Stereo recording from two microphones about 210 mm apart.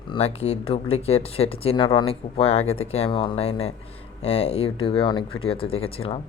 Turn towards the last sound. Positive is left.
turn(degrees=25)  # may be behind; listen again after turning